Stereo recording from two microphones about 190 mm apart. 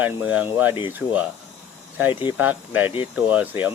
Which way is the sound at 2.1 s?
25° left (ahead or behind).